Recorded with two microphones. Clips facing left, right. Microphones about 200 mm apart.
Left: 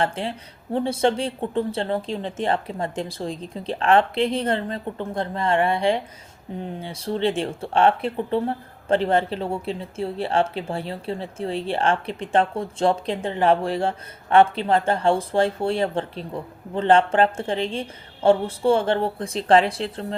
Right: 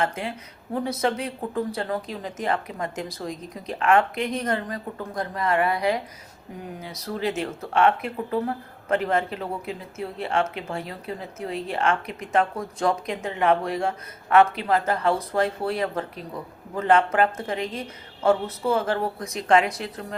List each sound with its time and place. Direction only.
0.0 s speech: 30° left (ahead or behind)